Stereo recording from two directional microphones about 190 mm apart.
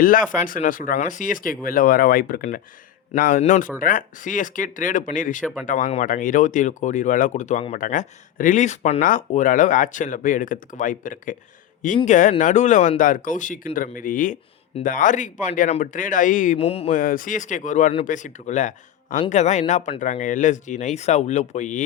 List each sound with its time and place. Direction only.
0.0 s speech: 45° left (ahead or behind)
16.6 s speech: 30° left (ahead or behind)
16.9 s speech: 45° left (ahead or behind)